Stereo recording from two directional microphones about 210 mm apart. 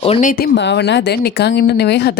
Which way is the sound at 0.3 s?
45° left (ahead or behind).